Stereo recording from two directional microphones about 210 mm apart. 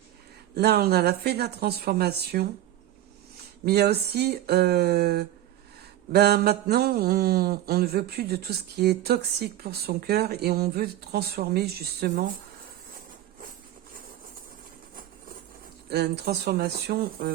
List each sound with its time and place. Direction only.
0.5 s mantra: 50° right (ahead or behind)
3.7 s mantra: 50° right (ahead or behind)
15.9 s mantra: 50° right (ahead or behind)